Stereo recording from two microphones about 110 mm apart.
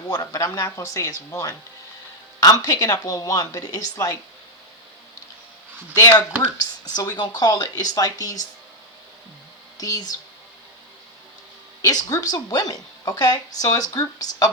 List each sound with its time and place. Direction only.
0.1 s a woman's voice: 30° left (ahead or behind)
5.9 s a woman's voice: 35° left (ahead or behind)
9.7 s speech: 35° left (ahead or behind)
11.8 s a woman's voice: 35° left (ahead or behind)